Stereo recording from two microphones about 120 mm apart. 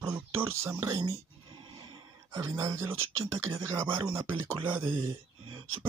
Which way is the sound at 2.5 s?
20° right (ahead or behind).